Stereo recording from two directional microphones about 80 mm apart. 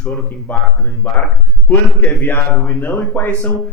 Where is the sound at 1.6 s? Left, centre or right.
Left.